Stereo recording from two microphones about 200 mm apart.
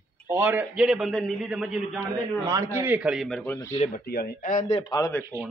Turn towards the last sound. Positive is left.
turn(degrees=15)  # may be behind; listen again after turning